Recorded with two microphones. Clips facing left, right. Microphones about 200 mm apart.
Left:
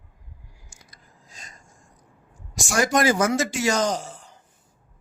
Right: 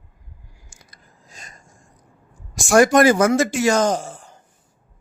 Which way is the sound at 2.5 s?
55° right (ahead or behind).